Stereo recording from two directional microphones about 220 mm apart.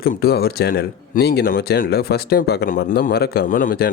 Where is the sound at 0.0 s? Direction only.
45° left (ahead or behind).